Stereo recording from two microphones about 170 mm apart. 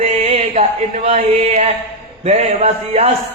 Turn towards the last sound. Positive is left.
turn(degrees=-40)  # may be behind; listen again after turning